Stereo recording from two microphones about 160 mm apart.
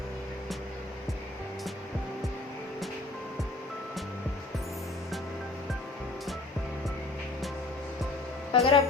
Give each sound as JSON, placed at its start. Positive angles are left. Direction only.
{"t": 8.5, "sound": "speech", "side_deg": 35}